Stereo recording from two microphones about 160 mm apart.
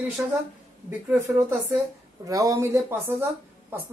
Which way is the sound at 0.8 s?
15° right (ahead or behind).